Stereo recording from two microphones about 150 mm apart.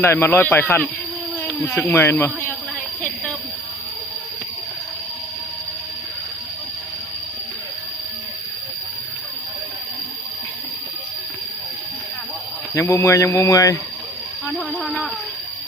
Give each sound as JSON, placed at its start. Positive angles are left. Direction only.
{"t": 0.0, "sound": "speech", "side_deg": 15}
{"t": 12.7, "sound": "speech", "side_deg": 20}
{"t": 14.7, "sound": "a sound", "side_deg": 10}